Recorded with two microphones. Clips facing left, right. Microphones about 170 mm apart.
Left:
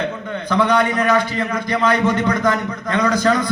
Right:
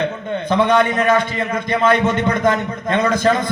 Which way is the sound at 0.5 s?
25° right (ahead or behind).